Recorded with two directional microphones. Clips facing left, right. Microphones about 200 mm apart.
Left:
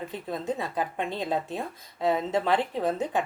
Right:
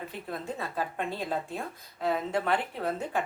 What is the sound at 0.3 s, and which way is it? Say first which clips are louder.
Speech: left 5 dB; 20° left (ahead or behind).